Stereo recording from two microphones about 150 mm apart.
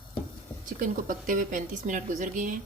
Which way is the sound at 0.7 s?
60° right (ahead or behind).